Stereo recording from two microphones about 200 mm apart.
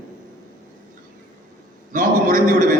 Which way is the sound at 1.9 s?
45° right (ahead or behind).